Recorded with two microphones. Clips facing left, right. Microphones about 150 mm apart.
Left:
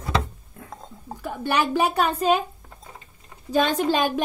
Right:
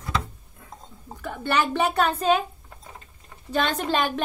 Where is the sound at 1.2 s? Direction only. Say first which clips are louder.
Left 1 dB; 10° left (ahead or behind).